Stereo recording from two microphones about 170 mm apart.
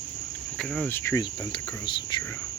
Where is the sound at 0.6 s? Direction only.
Centre (ahead or behind).